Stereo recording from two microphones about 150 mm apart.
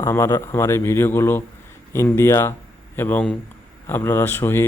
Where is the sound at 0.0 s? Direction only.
15° left (ahead or behind).